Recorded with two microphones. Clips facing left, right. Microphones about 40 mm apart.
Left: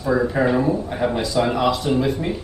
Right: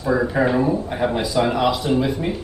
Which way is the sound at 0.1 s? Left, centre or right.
Centre.